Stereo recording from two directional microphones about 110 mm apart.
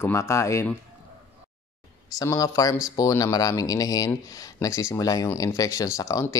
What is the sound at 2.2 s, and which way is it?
Speech, 30° left (ahead or behind).